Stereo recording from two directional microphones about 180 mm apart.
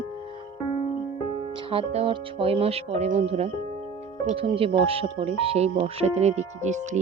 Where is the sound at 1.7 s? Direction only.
30° right (ahead or behind).